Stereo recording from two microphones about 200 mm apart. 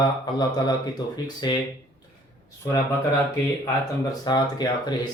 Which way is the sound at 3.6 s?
20° left (ahead or behind).